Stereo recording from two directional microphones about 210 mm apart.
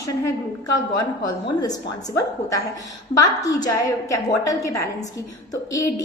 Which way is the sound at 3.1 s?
15° left (ahead or behind).